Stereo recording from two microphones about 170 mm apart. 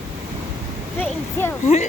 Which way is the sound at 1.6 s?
40° left (ahead or behind).